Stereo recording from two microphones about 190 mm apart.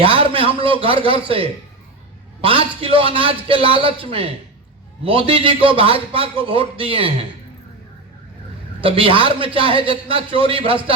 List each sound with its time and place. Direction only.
0.0 s a man's voice: 30° right (ahead or behind)
8.8 s speech: 30° right (ahead or behind)